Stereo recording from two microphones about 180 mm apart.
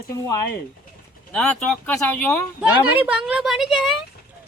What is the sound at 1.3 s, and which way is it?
Speech, 5° left (ahead or behind).